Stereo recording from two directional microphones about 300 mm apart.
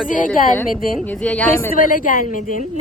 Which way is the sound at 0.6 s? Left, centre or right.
Centre.